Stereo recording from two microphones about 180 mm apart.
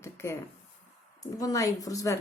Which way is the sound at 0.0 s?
15° left (ahead or behind).